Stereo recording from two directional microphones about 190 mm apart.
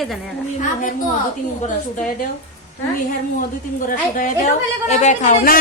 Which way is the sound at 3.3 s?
45° left (ahead or behind).